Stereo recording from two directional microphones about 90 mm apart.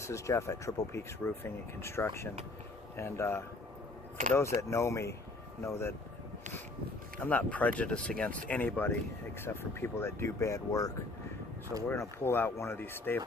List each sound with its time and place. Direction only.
0.0 s speech: 35° left (ahead or behind)
7.2 s speech: 15° left (ahead or behind); by 10.9 s 40° left (ahead or behind)
11.9 s speech: 25° left (ahead or behind)